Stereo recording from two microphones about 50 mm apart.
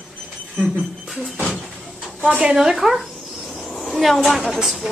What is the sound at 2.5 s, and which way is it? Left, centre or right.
A woman's voice, centre.